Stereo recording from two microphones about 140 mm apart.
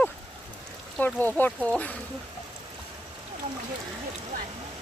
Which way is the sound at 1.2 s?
15° left (ahead or behind).